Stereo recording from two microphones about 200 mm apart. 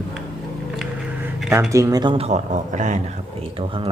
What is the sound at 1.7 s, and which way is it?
Speech, 15° right (ahead or behind).